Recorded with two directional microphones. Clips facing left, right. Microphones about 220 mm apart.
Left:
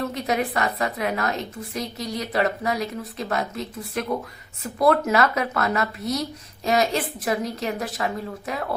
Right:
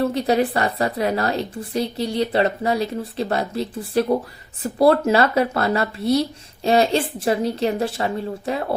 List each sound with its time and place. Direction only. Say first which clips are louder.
0.0 s a woman's voice: right 6 dB; 30° right (ahead or behind)